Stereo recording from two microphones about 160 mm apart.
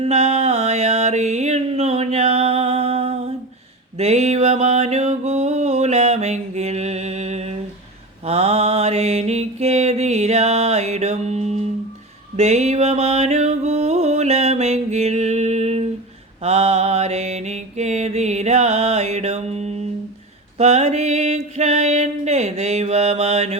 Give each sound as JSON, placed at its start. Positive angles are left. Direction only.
{"t": 0.0, "sound": "music", "side_deg": -45}
{"t": 3.9, "sound": "a sound", "side_deg": -40}
{"t": 8.2, "sound": "mantra", "side_deg": -40}
{"t": 12.4, "sound": "music", "side_deg": -45}
{"t": 16.4, "sound": "mantra", "side_deg": -40}
{"t": 20.6, "sound": "music", "side_deg": -45}